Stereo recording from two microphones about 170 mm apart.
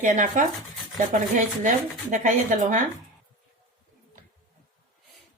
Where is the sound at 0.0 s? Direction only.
50° right (ahead or behind).